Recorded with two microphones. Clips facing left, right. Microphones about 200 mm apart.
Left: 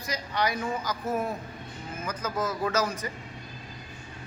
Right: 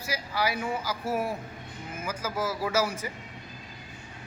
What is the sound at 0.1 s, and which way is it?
Speech, 5° right (ahead or behind).